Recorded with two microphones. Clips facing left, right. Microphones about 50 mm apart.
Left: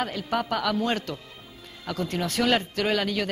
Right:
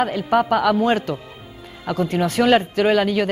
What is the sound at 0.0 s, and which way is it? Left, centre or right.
Speech, centre.